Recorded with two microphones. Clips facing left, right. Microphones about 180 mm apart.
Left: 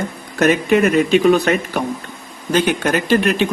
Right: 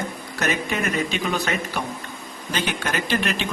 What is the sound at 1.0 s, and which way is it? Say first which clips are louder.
Speech: left 12 dB; 50° left (ahead or behind).